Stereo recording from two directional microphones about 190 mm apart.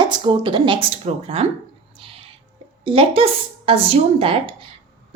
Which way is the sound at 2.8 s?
30° right (ahead or behind).